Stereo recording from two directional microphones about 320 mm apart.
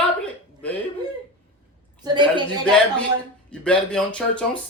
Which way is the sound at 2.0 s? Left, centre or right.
Centre.